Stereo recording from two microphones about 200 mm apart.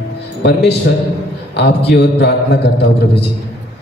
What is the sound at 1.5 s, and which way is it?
Speech, 55° left (ahead or behind).